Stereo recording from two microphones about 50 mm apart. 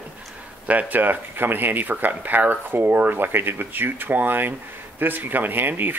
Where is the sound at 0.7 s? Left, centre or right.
Right.